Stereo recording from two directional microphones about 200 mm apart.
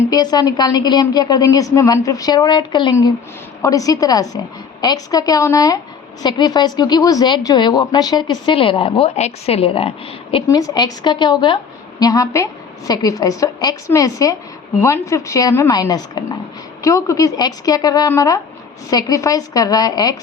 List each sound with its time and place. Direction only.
0.1 s a woman's voice: 20° left (ahead or behind)